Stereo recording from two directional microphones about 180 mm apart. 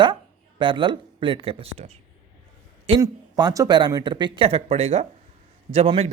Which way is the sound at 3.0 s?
20° right (ahead or behind).